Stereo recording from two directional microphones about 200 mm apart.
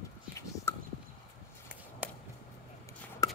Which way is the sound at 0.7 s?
10° left (ahead or behind).